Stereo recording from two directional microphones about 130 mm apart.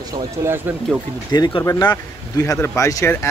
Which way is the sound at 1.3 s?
30° left (ahead or behind).